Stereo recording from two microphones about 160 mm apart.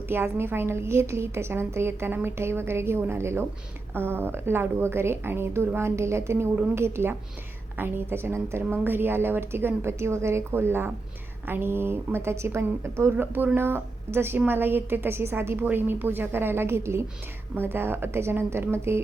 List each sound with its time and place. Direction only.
0.1 s a woman's voice: 15° right (ahead or behind)